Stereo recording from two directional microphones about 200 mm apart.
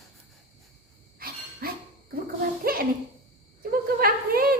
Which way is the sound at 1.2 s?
50° right (ahead or behind).